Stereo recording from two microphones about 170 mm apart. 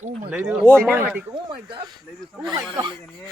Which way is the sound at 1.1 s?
10° right (ahead or behind).